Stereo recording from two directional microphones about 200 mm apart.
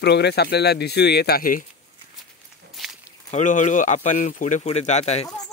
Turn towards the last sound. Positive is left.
turn(degrees=35)  # may be behind; listen again after turning